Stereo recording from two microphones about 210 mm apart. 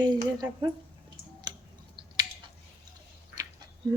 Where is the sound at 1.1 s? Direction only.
20° right (ahead or behind).